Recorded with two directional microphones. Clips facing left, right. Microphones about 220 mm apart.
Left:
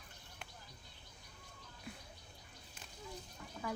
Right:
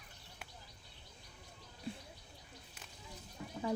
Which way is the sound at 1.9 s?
30° right (ahead or behind).